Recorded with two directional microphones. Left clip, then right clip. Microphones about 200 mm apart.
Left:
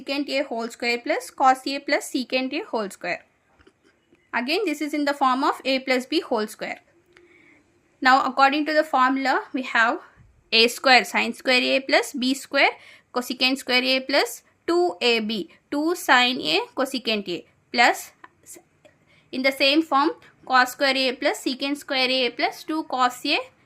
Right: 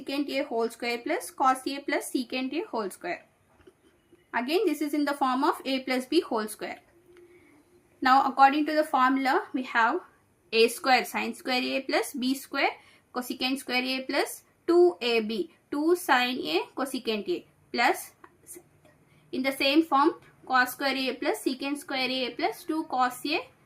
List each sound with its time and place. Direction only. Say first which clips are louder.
0.0 s a woman's voice: left 5 dB; 45° left (ahead or behind)
4.3 s a woman's voice: left 3 dB; 45° left (ahead or behind)